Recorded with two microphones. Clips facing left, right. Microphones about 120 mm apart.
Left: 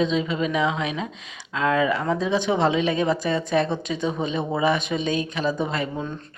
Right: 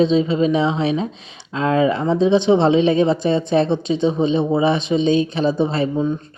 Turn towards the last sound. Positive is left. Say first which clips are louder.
# right 6 dB
turn(degrees=-30)  # may be behind; listen again after turning